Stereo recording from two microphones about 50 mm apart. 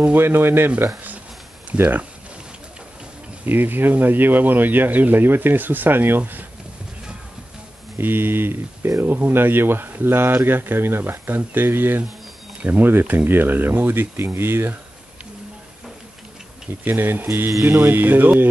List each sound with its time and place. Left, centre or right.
0.1 s speech: right
1.7 s speech: right
3.4 s speech: right
8.0 s speech: right
16.8 s speech: right
17.5 s speech: right
17.8 s speech: right